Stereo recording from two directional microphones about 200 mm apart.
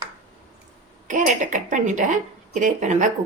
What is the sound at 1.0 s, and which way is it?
Speech, 40° right (ahead or behind).